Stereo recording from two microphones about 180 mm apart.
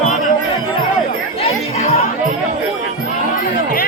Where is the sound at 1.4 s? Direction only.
35° left (ahead or behind).